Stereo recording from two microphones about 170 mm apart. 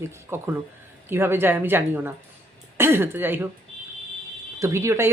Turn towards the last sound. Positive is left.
turn(degrees=-15)  # may be behind; listen again after turning